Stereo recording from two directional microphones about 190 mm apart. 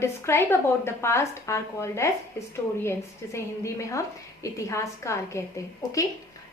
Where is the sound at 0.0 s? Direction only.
15° left (ahead or behind).